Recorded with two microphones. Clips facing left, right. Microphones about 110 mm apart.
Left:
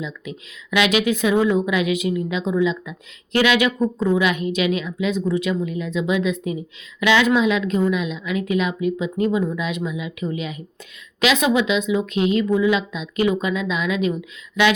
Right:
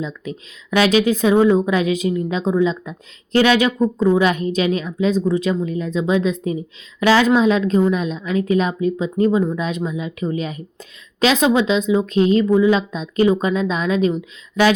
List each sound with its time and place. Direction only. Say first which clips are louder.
0.0 s a woman's voice: right 4 dB; 35° right (ahead or behind)